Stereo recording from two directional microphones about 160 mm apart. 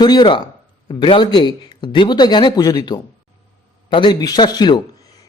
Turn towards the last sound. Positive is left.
turn(degrees=25)  # may be behind; listen again after turning